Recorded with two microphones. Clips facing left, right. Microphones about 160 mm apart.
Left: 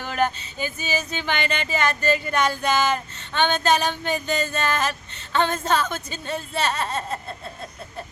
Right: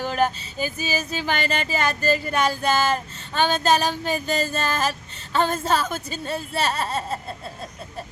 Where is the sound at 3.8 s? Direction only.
5° right (ahead or behind).